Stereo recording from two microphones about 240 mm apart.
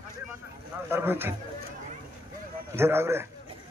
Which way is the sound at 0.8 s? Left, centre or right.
Centre.